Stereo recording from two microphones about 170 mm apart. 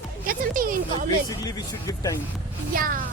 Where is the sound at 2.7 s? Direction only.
55° right (ahead or behind).